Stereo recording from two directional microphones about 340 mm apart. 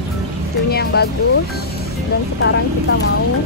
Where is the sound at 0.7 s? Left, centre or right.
Left.